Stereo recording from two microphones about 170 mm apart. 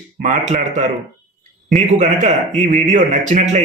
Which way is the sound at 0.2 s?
45° right (ahead or behind).